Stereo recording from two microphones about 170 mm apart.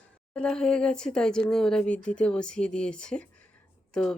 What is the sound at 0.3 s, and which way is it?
Speech, 5° left (ahead or behind).